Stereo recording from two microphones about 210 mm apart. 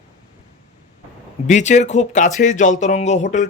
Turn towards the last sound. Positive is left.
turn(degrees=35)  # may be behind; listen again after turning